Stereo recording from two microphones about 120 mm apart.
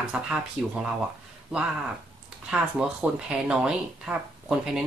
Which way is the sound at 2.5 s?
10° right (ahead or behind).